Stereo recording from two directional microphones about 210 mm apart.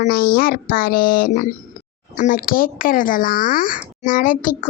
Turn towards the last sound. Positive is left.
turn(degrees=40)  # may be behind; listen again after turning